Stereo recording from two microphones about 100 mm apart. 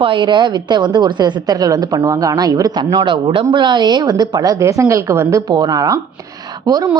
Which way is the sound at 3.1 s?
55° right (ahead or behind).